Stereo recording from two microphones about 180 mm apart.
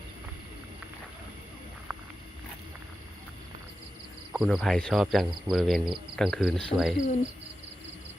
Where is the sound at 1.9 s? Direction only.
5° right (ahead or behind).